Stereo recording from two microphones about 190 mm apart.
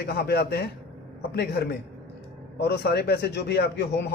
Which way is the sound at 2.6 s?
60° left (ahead or behind).